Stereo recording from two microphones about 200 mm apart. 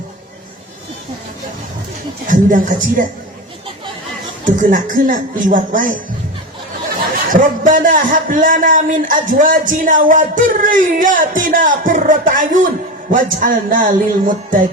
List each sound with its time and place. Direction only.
2.2 s a man's voice: 40° right (ahead or behind)
4.4 s a man's voice: 40° right (ahead or behind)
7.3 s a man's voice: 40° right (ahead or behind)
13.4 s music: 45° right (ahead or behind)